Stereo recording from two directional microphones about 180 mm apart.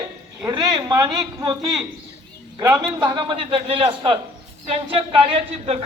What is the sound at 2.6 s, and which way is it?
A man's voice, 20° right (ahead or behind).